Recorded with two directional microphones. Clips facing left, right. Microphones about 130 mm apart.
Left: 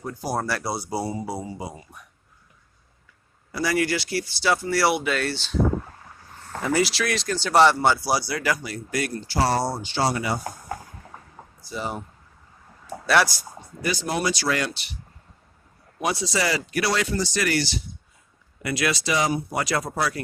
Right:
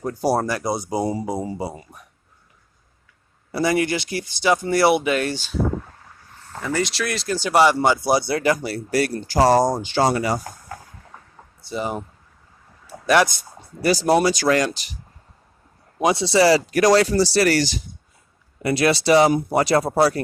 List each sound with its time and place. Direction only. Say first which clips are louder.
0.0 s speech: right 7 dB; 40° right (ahead or behind)
0.4 s speech: right 4 dB; 15° right (ahead or behind)
1.5 s speech: right 6 dB; 30° right (ahead or behind)
3.5 s speech: right 3 dB; 25° right (ahead or behind)
6.6 s speech: left 1 dB; 15° left (ahead or behind)
6.8 s speech: right 1 dB; centre (ahead or behind)
7.3 s speech: right 1 dB; 10° right (ahead or behind); by 10.3 s 45° right (ahead or behind)
11.6 s speech: right 5 dB; 20° right (ahead or behind)
13.8 s speech: right 8 dB; 40° right (ahead or behind)
16.0 s speech: right 9 dB; 25° right (ahead or behind)
18.6 s speech: right 7 dB; 30° right (ahead or behind)